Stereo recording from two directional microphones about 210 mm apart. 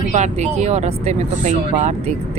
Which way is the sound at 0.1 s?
35° right (ahead or behind).